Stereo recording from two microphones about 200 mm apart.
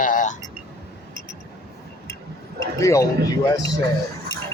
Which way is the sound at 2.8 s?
15° left (ahead or behind).